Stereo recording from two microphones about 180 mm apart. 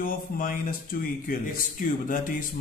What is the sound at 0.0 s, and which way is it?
Speech, 50° left (ahead or behind).